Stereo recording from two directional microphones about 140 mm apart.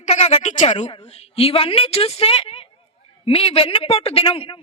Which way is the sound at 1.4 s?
45° left (ahead or behind).